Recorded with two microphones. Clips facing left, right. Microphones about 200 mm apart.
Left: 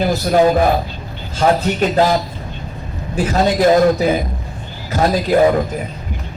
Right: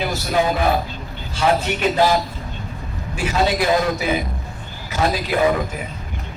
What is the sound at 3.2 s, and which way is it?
Speech, 40° left (ahead or behind).